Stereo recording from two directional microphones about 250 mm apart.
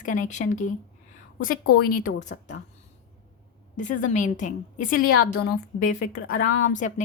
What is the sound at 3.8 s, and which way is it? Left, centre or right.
A woman's voice, left.